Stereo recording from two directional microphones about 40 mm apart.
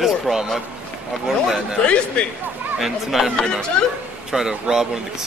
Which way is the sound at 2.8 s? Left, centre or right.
Centre.